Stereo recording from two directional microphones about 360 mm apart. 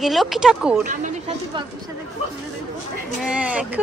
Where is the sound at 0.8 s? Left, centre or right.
Centre.